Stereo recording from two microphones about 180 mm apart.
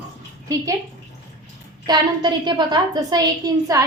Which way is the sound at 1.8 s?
25° right (ahead or behind).